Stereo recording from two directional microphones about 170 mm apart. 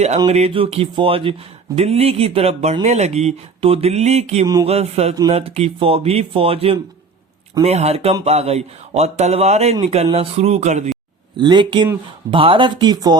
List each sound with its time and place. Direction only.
0.3 s speech: 35° right (ahead or behind)
11.3 s speech: 25° right (ahead or behind)